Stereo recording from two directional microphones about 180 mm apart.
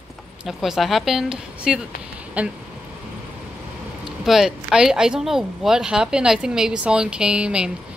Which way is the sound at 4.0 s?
Centre (ahead or behind).